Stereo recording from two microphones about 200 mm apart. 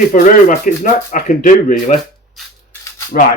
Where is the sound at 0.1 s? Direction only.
40° left (ahead or behind).